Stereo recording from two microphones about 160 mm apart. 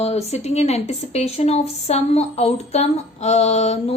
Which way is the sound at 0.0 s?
40° left (ahead or behind).